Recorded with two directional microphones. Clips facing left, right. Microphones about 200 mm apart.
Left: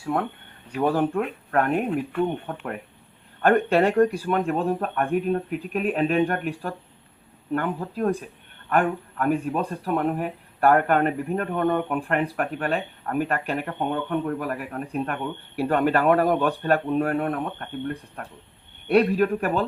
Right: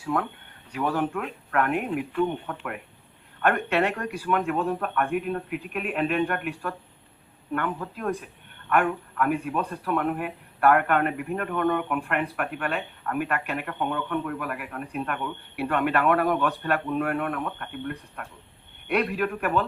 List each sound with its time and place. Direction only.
0.8 s speech: 35° left (ahead or behind)
3.4 s speech: 30° left (ahead or behind)